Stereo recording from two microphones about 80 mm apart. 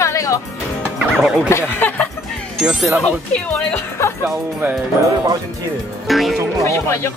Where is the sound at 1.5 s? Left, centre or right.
Left.